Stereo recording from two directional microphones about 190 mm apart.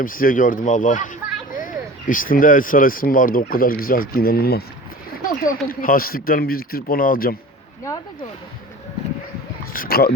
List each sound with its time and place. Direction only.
0.0 s speech: 45° left (ahead or behind)
9.7 s speech: 50° left (ahead or behind)